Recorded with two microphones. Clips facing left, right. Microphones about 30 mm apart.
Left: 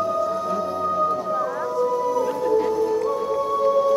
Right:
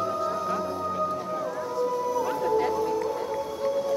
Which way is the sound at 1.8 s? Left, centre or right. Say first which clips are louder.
Left 5 dB; centre.